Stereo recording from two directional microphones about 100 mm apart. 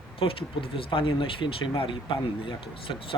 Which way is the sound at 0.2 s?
65° left (ahead or behind).